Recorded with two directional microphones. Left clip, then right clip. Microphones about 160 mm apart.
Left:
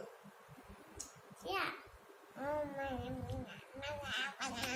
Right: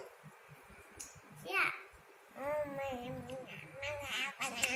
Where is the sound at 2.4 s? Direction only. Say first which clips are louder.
Right 2 dB; 30° right (ahead or behind).